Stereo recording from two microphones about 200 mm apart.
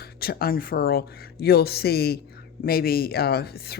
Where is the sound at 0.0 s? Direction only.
50° left (ahead or behind).